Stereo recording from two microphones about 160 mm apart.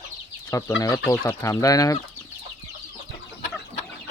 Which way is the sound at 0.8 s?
20° left (ahead or behind).